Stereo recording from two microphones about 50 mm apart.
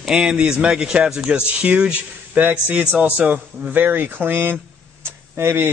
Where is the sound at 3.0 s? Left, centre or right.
Right.